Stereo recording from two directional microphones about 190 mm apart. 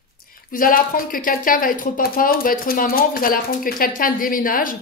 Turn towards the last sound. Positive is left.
turn(degrees=45)  # may be behind; listen again after turning